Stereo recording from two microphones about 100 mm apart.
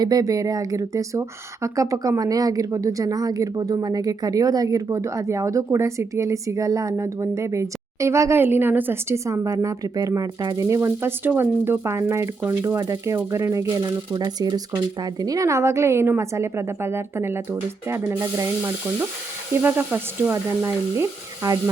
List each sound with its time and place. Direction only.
0.0 s speech: 40° right (ahead or behind)
19.6 s speech: 20° right (ahead or behind)